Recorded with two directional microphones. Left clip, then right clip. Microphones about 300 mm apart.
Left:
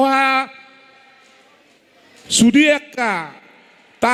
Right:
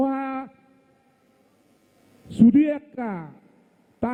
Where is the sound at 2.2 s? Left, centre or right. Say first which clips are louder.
Left 6 dB; centre.